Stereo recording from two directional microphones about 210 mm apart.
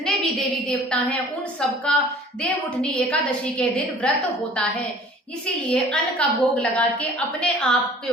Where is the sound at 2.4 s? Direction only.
5° left (ahead or behind).